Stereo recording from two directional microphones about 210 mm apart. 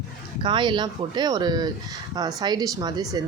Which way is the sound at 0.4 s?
25° right (ahead or behind).